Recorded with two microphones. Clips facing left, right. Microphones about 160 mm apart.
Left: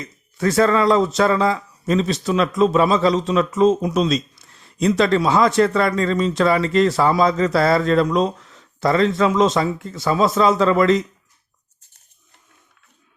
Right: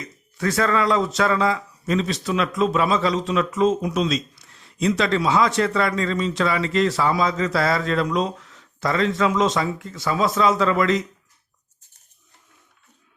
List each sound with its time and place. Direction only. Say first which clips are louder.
0.3 s speech: left 5 dB; 30° left (ahead or behind)